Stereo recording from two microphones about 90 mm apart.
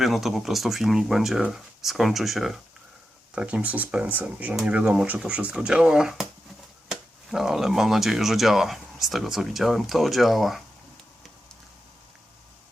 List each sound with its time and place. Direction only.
0.0 s speech: 5° right (ahead or behind)
3.3 s speech: 10° right (ahead or behind)